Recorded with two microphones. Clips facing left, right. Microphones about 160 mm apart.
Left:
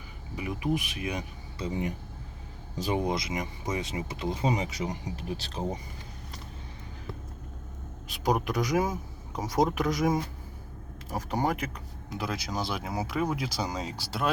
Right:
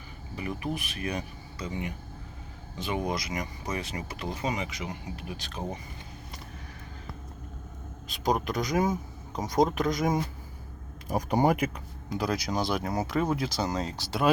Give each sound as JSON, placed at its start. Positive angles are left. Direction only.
{"t": 0.3, "sound": "speech", "side_deg": 15}
{"t": 1.5, "sound": "speech", "side_deg": 35}
{"t": 3.0, "sound": "speech", "side_deg": 25}
{"t": 8.0, "sound": "speech", "side_deg": 10}
{"t": 11.1, "sound": "speech", "side_deg": -15}
{"t": 12.1, "sound": "speech", "side_deg": 0}